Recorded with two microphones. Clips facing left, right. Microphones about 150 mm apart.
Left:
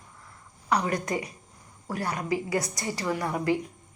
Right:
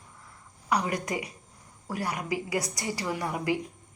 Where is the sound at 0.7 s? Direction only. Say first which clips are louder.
Left 2 dB; 15° right (ahead or behind).